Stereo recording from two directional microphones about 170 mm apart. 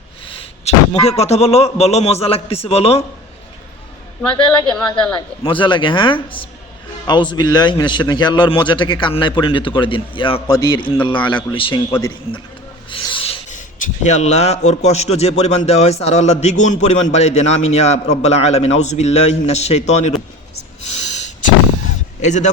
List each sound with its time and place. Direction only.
0.3 s a man's voice: 30° left (ahead or behind)
4.2 s a man's voice: 5° left (ahead or behind)
5.1 s a man's voice: 30° left (ahead or behind)
12.9 s rub: 30° left (ahead or behind)
13.5 s a man's voice: 50° left (ahead or behind)
21.1 s a sound: 45° left (ahead or behind)
22.2 s speech: 45° left (ahead or behind)